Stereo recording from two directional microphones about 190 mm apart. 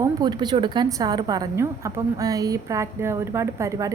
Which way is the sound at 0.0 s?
20° right (ahead or behind).